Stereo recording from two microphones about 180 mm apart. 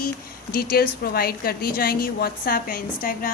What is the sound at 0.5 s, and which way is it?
A woman's voice, 55° left (ahead or behind).